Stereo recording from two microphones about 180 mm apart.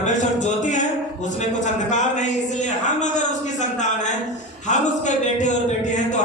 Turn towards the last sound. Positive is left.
turn(degrees=40)  # may be behind; listen again after turning